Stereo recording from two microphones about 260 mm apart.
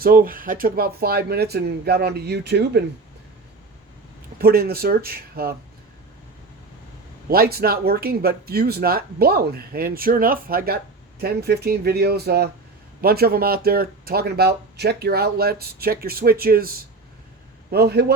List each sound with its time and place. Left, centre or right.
0.0 s speech: right
4.4 s speech: right
7.3 s a man's voice: right